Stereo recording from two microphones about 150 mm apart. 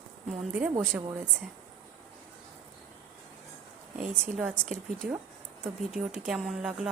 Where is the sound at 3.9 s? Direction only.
10° right (ahead or behind).